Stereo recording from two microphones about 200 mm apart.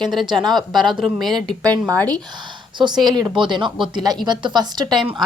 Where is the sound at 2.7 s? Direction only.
20° right (ahead or behind).